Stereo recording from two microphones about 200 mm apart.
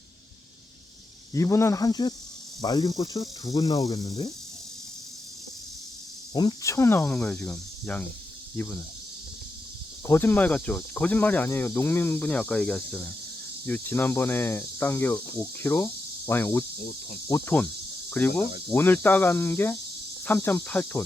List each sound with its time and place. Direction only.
1.3 s speech: 15° left (ahead or behind)
6.3 s speech: 20° left (ahead or behind)
10.1 s speech: 10° left (ahead or behind)